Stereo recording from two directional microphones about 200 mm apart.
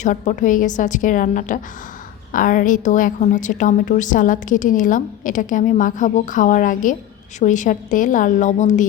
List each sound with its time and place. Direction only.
0.0 s a woman's voice: 40° left (ahead or behind)